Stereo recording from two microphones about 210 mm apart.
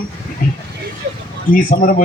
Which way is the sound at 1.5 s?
40° left (ahead or behind).